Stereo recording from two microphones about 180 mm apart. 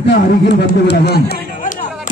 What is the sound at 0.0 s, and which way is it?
Speech, 65° left (ahead or behind).